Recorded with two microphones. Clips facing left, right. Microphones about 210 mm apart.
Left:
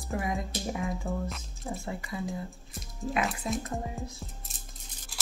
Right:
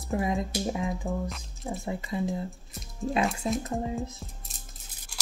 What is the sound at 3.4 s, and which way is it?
Speech, 25° right (ahead or behind).